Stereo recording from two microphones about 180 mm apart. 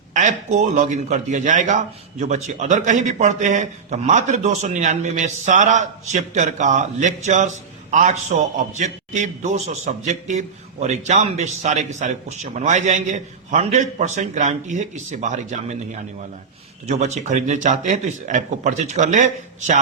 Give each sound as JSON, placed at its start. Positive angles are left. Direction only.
{"t": 0.1, "sound": "speech", "side_deg": -45}
{"t": 16.8, "sound": "a man's voice", "side_deg": -40}